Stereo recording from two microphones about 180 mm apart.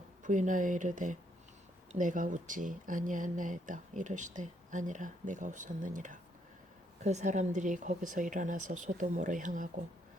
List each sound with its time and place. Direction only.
0.2 s speech: 45° right (ahead or behind)